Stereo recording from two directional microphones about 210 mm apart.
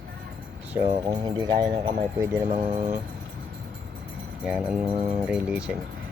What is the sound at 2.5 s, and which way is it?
Speech, 20° right (ahead or behind).